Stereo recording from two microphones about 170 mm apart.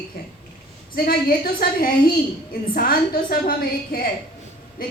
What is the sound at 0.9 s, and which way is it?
A woman's voice, 60° left (ahead or behind).